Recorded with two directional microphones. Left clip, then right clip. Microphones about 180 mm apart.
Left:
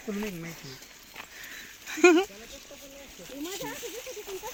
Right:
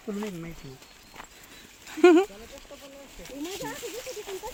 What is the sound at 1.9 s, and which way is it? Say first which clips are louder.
Speech: right 2 dB; 15° right (ahead or behind).